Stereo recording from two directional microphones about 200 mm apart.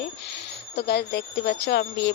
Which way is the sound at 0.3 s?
55° left (ahead or behind).